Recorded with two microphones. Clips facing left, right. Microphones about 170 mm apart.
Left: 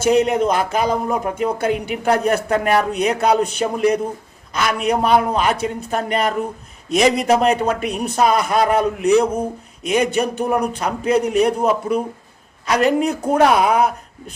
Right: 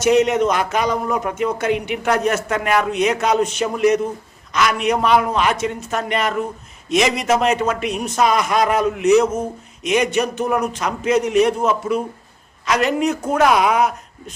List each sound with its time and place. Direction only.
0.0 s a man's voice: 30° left (ahead or behind)